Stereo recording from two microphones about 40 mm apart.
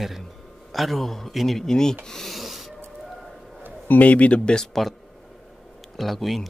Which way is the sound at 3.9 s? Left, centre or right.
Left.